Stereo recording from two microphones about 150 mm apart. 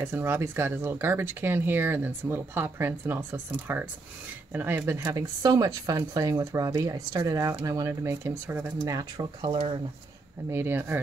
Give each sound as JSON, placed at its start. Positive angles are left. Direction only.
{"t": 0.0, "sound": "speech", "side_deg": -15}
{"t": 10.5, "sound": "speech", "side_deg": -15}